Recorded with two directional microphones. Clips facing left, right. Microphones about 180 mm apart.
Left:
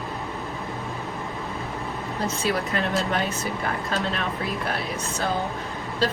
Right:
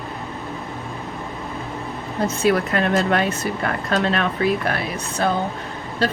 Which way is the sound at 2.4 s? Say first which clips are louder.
Right 8 dB; 60° right (ahead or behind).